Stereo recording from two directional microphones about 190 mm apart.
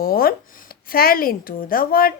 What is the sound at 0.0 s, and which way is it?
Speech, 50° left (ahead or behind).